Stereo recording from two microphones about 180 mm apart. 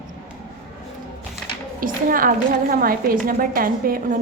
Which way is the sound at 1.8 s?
50° right (ahead or behind).